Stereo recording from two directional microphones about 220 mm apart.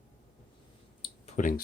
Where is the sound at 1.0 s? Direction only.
30° left (ahead or behind).